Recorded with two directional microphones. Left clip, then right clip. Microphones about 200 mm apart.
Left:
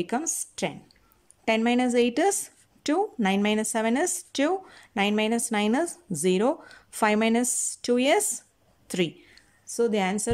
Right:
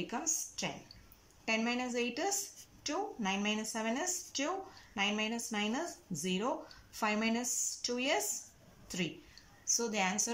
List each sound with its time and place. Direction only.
0.0 s speech: 50° left (ahead or behind)
9.3 s a woman's voice: 40° left (ahead or behind)